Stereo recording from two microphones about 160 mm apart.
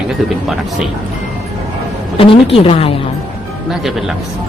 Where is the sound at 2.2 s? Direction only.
35° left (ahead or behind).